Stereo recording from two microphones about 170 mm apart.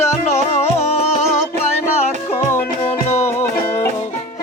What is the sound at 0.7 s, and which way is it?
Music, 40° left (ahead or behind).